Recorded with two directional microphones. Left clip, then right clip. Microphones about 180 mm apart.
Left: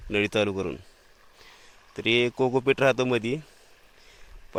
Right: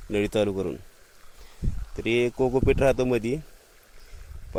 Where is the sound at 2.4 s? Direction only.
15° right (ahead or behind).